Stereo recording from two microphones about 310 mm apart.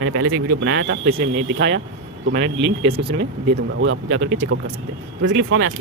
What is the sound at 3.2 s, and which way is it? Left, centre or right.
Speech, right.